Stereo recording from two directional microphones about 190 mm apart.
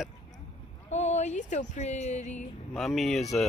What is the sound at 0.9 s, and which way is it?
Speech, 35° left (ahead or behind).